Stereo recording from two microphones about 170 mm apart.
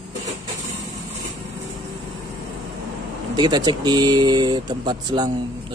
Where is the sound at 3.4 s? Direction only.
25° right (ahead or behind).